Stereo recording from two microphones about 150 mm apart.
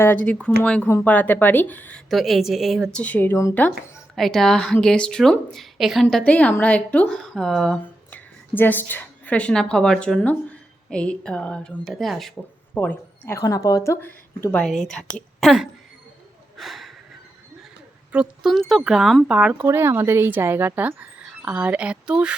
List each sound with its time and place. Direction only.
0.0 s speech: 10° left (ahead or behind)
2.0 s speech: centre (ahead or behind)
4.1 s speech: centre (ahead or behind)
16.6 s a sound: centre (ahead or behind)
18.1 s speech: 5° right (ahead or behind)